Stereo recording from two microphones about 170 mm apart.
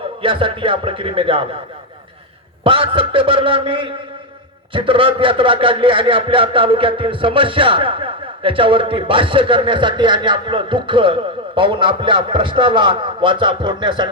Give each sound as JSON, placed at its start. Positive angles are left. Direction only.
{"t": 0.2, "sound": "a man's voice", "side_deg": -30}
{"t": 2.6, "sound": "a man's voice", "side_deg": -30}